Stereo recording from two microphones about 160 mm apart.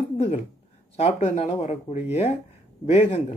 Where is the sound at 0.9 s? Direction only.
45° left (ahead or behind).